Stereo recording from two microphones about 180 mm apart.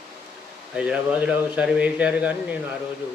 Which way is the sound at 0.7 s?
5° right (ahead or behind).